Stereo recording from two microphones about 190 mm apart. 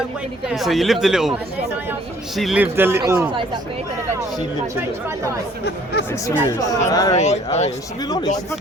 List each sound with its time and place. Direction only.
0.4 s speech: centre (ahead or behind)
5.6 s speech: 60° left (ahead or behind)
6.1 s speech: 15° left (ahead or behind)
7.2 s speech: 35° left (ahead or behind)
8.0 s speech: 20° left (ahead or behind)